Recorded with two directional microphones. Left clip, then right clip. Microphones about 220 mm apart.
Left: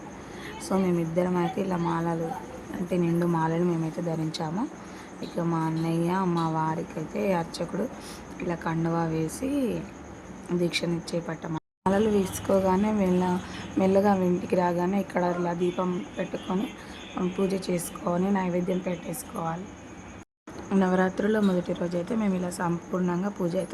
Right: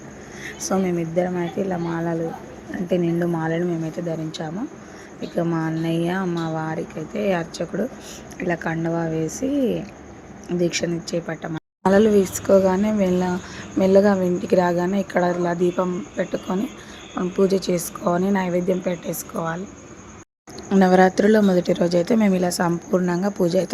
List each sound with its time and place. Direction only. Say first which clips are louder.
0.4 s speech: right 5 dB; 5° right (ahead or behind)
5.5 s a woman's voice: right 4 dB; 10° right (ahead or behind)
20.7 s a woman's voice: right 10 dB; 15° right (ahead or behind)